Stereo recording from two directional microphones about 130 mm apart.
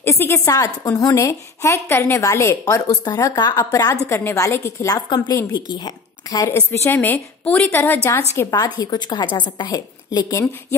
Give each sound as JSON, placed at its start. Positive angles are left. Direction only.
{"t": 0.0, "sound": "a woman's voice", "side_deg": 20}
{"t": 8.4, "sound": "a woman's voice", "side_deg": 30}